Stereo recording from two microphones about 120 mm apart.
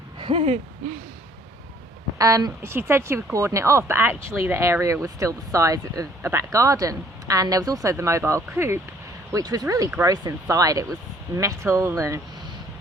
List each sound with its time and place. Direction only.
0.2 s hoot: 50° right (ahead or behind)
2.1 s speech: 30° right (ahead or behind)